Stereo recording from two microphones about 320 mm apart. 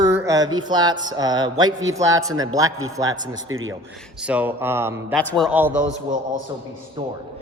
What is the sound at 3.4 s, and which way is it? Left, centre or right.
Speech, right.